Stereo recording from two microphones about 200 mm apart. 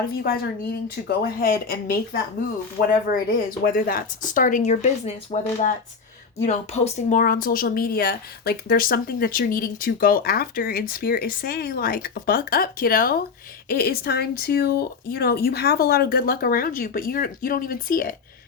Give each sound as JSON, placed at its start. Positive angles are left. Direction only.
{"t": 0.2, "sound": "speech", "side_deg": 50}
{"t": 3.1, "sound": "speech", "side_deg": 45}